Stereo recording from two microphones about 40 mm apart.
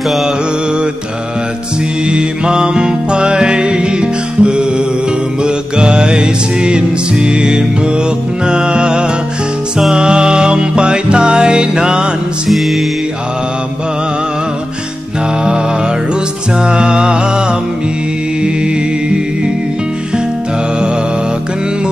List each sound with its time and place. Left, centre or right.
2.0 s music: right
12.4 s music: centre
16.5 s music: right